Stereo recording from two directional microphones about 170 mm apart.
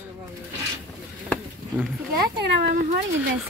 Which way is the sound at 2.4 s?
75° right (ahead or behind).